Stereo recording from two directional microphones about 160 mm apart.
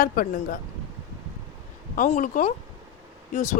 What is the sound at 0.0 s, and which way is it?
Speech, 65° left (ahead or behind).